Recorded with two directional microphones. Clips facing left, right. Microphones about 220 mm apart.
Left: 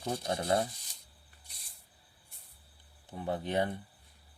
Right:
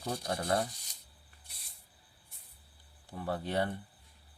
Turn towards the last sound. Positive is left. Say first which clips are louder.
# left 1 dB
turn(degrees=20)  # may be behind; listen again after turning